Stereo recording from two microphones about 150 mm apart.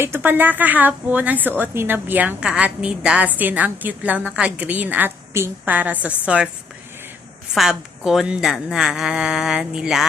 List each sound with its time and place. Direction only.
0.0 s a woman's voice: 15° right (ahead or behind)
7.5 s a woman's voice: centre (ahead or behind)